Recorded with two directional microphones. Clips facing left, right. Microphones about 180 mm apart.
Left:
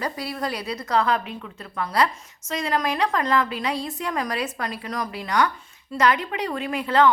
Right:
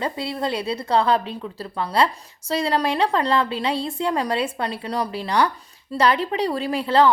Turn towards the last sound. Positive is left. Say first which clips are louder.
# right 2 dB
turn(degrees=-30)  # may be behind; listen again after turning